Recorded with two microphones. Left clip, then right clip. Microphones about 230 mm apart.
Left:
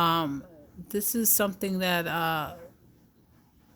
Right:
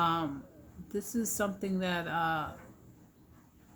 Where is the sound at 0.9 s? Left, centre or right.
Left.